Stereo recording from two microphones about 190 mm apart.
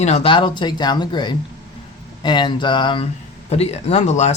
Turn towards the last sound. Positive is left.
turn(degrees=35)  # may be behind; listen again after turning